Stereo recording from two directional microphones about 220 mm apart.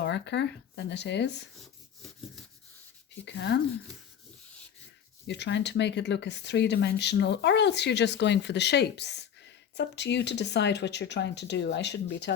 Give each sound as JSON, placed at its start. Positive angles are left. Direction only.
{"t": 0.0, "sound": "speech", "side_deg": 50}
{"t": 3.2, "sound": "speech", "side_deg": 50}
{"t": 5.2, "sound": "speech", "side_deg": 50}